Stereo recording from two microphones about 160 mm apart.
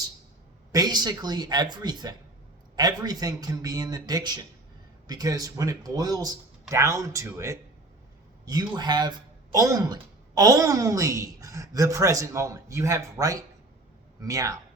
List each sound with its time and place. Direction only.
0.7 s speech: 25° right (ahead or behind)